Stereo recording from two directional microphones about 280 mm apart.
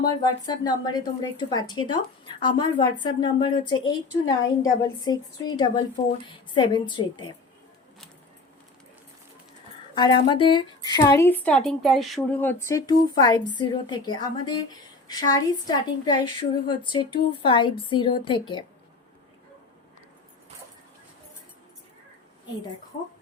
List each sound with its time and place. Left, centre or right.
0.0 s a woman's voice: centre
9.9 s a woman's voice: centre